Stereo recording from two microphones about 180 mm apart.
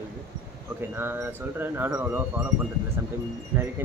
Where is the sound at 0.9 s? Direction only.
10° right (ahead or behind).